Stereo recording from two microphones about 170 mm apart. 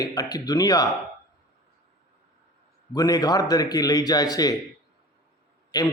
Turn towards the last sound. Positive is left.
turn(degrees=20)  # may be behind; listen again after turning